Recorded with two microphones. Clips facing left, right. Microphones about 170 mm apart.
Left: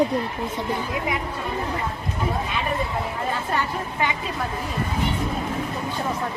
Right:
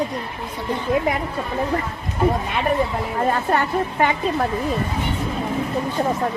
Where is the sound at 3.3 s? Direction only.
55° right (ahead or behind).